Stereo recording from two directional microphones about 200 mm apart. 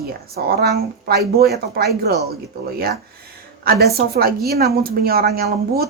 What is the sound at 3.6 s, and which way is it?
A woman's voice, 50° right (ahead or behind).